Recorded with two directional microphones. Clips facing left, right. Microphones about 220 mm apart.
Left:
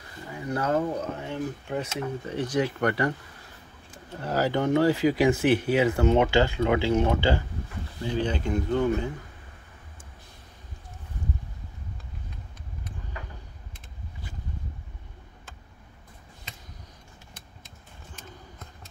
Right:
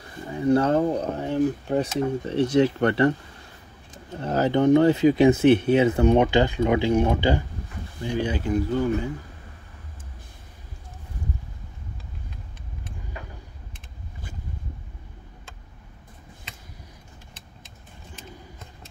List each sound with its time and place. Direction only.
0.3 s speech: 30° right (ahead or behind)
4.2 s speech: 20° right (ahead or behind)